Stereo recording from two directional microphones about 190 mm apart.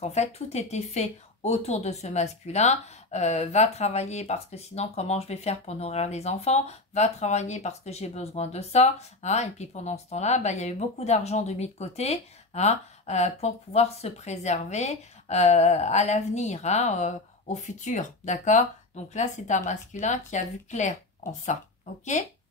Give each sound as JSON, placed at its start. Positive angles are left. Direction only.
{"t": 0.0, "sound": "speech", "side_deg": 35}